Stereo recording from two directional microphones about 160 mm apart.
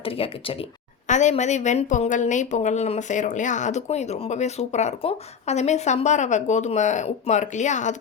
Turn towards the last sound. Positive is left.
turn(degrees=50)  # may be behind; listen again after turning